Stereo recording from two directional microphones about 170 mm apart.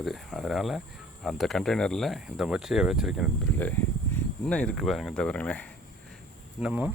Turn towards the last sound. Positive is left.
turn(degrees=-10)  # may be behind; listen again after turning